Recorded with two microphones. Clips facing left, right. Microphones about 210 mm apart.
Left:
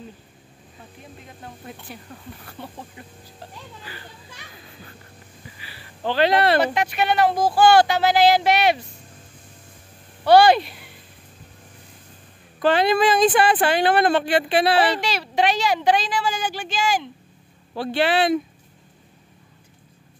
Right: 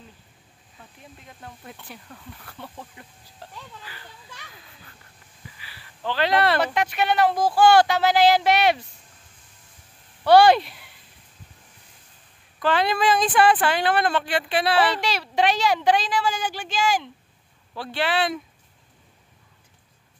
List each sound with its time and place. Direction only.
5.7 s speech: 30° left (ahead or behind)
6.7 s speech: 5° left (ahead or behind)
10.2 s speech: centre (ahead or behind)
12.6 s speech: 25° left (ahead or behind)
15.0 s speech: 5° left (ahead or behind)
17.7 s speech: 25° left (ahead or behind)